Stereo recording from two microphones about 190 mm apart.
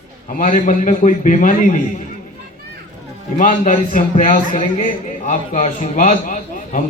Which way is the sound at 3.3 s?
45° left (ahead or behind).